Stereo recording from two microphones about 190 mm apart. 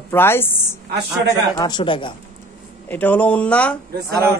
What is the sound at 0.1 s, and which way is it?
Speech, 10° left (ahead or behind).